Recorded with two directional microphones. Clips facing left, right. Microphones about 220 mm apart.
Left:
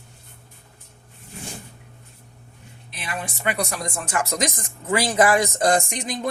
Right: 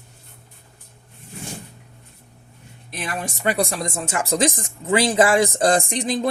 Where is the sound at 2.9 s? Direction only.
45° right (ahead or behind).